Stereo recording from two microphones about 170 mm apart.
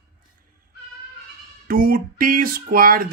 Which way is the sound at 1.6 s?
60° right (ahead or behind).